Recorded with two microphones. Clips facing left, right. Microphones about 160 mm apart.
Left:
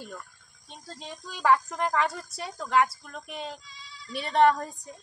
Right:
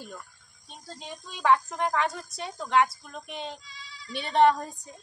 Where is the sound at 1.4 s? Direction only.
5° left (ahead or behind).